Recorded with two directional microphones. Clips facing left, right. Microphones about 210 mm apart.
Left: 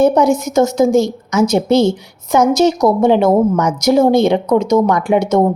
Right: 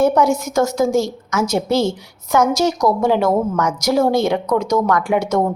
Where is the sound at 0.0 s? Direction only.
20° left (ahead or behind).